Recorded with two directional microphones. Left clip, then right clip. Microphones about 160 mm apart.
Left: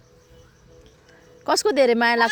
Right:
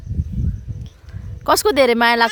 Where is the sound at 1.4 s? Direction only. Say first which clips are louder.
Right 4 dB; 40° right (ahead or behind).